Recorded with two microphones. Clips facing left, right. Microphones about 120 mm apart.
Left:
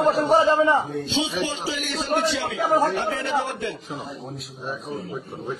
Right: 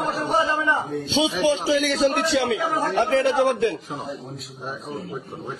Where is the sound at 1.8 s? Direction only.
90° right.